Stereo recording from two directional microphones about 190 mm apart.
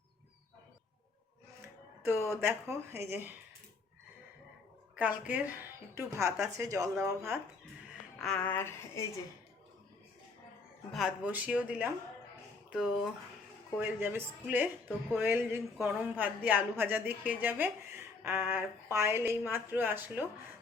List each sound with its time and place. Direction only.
2.3 s speech: 15° right (ahead or behind)
4.9 s speech: 10° right (ahead or behind)
8.2 s a woman's voice: 5° left (ahead or behind)
10.9 s speech: 5° right (ahead or behind)